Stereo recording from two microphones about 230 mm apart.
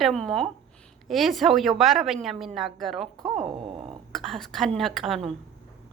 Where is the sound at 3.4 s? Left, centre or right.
Right.